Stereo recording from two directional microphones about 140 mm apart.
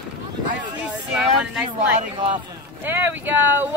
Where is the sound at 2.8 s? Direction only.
15° right (ahead or behind).